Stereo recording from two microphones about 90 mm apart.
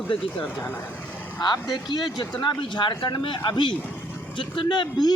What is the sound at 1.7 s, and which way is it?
A man's voice, 55° left (ahead or behind).